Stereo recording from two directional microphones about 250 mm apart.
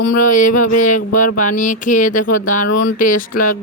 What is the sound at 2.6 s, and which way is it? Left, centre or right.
Speech, left.